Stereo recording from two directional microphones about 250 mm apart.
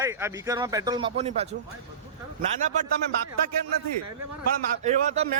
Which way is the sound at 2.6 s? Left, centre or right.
Right.